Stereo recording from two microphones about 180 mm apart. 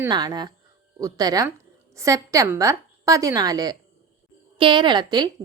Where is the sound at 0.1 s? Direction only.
25° right (ahead or behind).